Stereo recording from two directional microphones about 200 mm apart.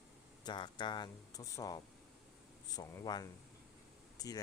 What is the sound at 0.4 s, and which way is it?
Speech, 25° left (ahead or behind).